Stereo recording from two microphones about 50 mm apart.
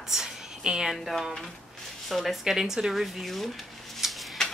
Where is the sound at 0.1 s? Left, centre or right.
Centre.